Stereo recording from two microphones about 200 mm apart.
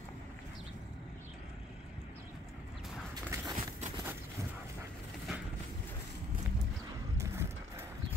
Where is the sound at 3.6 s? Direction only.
35° right (ahead or behind).